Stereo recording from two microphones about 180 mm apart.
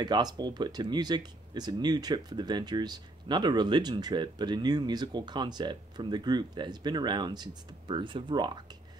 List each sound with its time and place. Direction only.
0.0 s speech: 25° right (ahead or behind)